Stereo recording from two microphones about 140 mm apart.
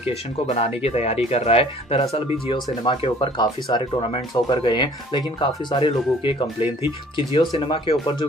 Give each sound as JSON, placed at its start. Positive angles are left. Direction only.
{"t": 0.6, "sound": "speech", "side_deg": 50}